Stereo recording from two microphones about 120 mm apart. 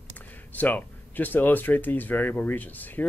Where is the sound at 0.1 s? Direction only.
15° left (ahead or behind).